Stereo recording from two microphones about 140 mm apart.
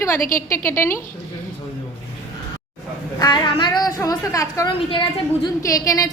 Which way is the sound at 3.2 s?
35° left (ahead or behind).